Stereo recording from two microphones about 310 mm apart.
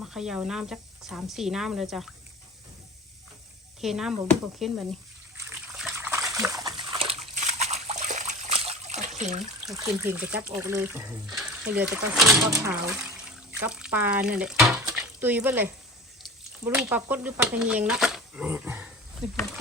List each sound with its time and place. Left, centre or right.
0.0 s speech: centre
3.8 s speech: centre
5.4 s water: centre; by 9.4 s right
9.6 s speech: centre